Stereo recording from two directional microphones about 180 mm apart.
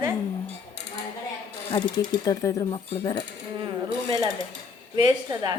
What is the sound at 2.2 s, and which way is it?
Speech, 20° left (ahead or behind).